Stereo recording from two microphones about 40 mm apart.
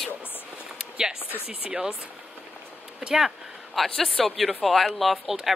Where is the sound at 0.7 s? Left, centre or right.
Centre.